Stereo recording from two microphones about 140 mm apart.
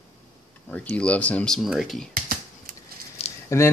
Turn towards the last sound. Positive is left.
turn(degrees=20)  # may be behind; listen again after turning